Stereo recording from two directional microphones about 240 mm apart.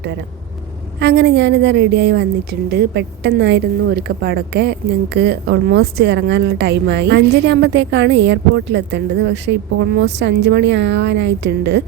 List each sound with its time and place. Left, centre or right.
0.9 s speech: right